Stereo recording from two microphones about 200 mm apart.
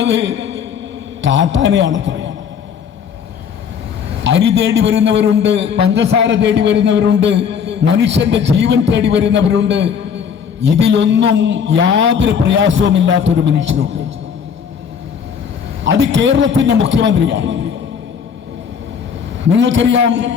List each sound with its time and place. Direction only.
0.0 s a sound: 60° right (ahead or behind)
1.2 s a man's voice: 65° right (ahead or behind)
4.2 s a man's voice: 60° right (ahead or behind)
15.8 s a man's voice: 60° right (ahead or behind)
19.5 s a man's voice: 65° right (ahead or behind)